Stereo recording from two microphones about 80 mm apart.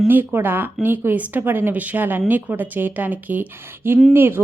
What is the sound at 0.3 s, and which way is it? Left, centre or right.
Speech, right.